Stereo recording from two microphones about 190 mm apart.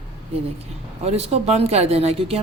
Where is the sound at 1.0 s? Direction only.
35° right (ahead or behind).